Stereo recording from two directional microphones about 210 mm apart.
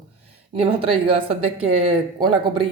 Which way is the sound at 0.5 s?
25° right (ahead or behind).